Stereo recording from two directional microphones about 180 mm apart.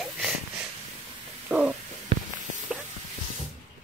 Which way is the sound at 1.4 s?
5° right (ahead or behind).